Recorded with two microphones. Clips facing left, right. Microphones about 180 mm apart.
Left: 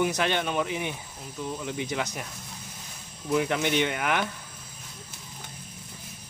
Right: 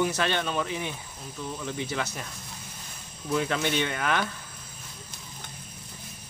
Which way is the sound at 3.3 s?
15° left (ahead or behind).